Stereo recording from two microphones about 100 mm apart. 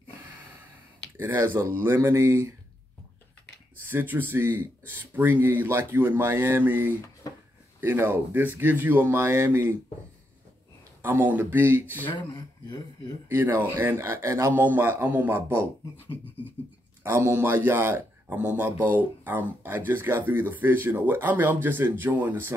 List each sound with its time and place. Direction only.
1.1 s a man's voice: 20° right (ahead or behind)
3.8 s a man's voice: 20° right (ahead or behind)
7.2 s a sound: 35° left (ahead or behind)
7.8 s a man's voice: 20° right (ahead or behind)
11.0 s a man's voice: 25° right (ahead or behind)
12.1 s speech: 50° left (ahead or behind)
13.3 s a man's voice: 20° right (ahead or behind)
17.0 s a man's voice: 25° right (ahead or behind)